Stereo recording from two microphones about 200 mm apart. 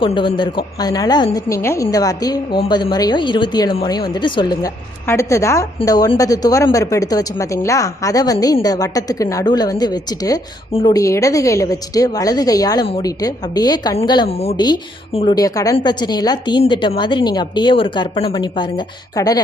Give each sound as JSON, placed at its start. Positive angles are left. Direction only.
{"t": 0.0, "sound": "a woman's voice", "side_deg": 25}